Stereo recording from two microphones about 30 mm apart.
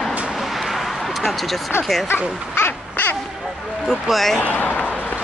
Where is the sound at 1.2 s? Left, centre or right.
Centre.